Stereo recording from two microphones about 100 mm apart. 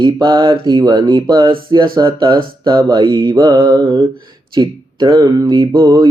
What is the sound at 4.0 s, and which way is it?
Speech, 50° right (ahead or behind).